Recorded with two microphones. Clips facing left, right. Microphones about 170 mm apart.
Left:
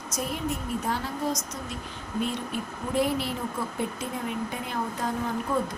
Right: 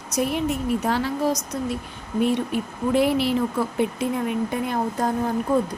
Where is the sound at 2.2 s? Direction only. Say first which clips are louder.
Right 8 dB; 65° right (ahead or behind).